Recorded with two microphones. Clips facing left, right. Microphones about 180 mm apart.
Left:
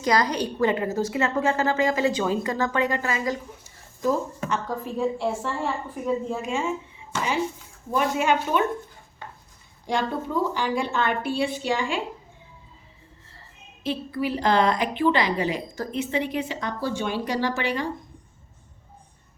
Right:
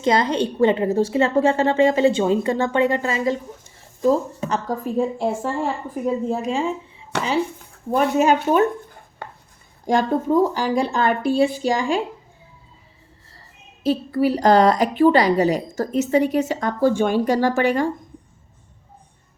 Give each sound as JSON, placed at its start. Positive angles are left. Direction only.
{"t": 0.0, "sound": "a woman's voice", "side_deg": -25}
{"t": 7.1, "sound": "a woman's voice", "side_deg": -70}
{"t": 8.2, "sound": "speech", "side_deg": -40}
{"t": 9.2, "sound": "chopping", "side_deg": -65}
{"t": 9.8, "sound": "speech", "side_deg": -45}
{"t": 13.8, "sound": "a woman's voice", "side_deg": -40}